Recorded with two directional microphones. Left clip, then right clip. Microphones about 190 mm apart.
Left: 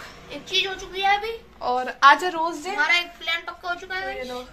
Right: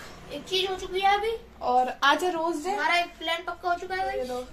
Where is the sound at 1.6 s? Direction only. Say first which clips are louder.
Left 6 dB; 15° left (ahead or behind).